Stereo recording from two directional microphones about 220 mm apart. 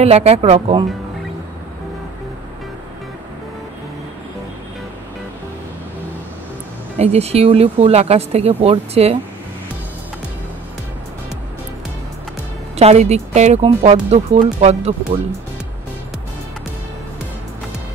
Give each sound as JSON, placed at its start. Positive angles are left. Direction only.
{"t": 0.0, "sound": "speech", "side_deg": -30}
{"t": 7.0, "sound": "speech", "side_deg": -30}
{"t": 12.7, "sound": "speech", "side_deg": -30}